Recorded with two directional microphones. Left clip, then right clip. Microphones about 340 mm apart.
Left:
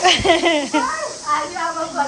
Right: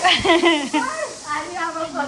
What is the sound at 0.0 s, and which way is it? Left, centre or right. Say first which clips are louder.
Speech: left 1 dB; centre.